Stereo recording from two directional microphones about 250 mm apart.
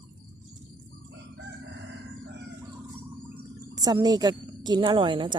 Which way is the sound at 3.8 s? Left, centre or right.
Centre.